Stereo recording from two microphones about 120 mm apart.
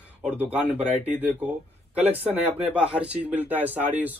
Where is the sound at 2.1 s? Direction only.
15° right (ahead or behind).